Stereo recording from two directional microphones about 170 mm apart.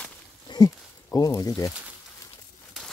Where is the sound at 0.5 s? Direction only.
20° left (ahead or behind).